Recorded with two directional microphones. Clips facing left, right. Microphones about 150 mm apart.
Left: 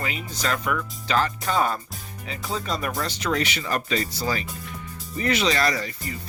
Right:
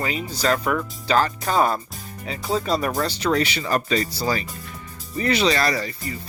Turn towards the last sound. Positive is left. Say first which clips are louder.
# right 2 dB
turn(degrees=-35)  # may be behind; listen again after turning